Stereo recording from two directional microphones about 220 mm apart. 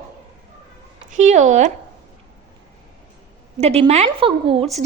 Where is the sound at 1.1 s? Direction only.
30° right (ahead or behind).